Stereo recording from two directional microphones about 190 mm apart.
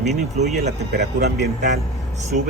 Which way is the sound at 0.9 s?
55° right (ahead or behind).